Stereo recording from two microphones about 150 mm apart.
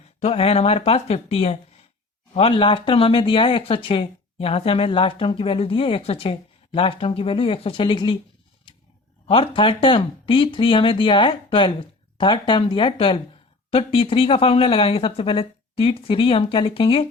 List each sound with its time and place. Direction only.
0.2 s speech: 45° left (ahead or behind)
9.2 s speech: 35° left (ahead or behind)